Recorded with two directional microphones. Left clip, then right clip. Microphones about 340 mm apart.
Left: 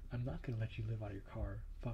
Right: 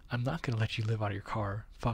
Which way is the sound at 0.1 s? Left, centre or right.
Right.